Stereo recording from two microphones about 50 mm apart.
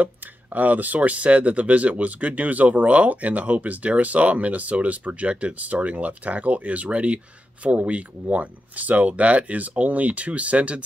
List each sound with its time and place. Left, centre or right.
0.0 s speech: right